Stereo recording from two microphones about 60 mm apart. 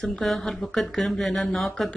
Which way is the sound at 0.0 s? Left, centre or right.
Centre.